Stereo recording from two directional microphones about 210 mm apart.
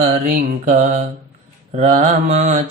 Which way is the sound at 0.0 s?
40° right (ahead or behind).